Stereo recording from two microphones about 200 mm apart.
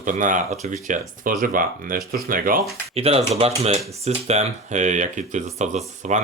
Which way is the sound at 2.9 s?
30° right (ahead or behind).